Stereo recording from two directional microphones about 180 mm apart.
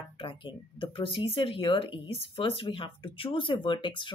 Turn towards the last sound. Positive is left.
turn(degrees=25)  # may be behind; listen again after turning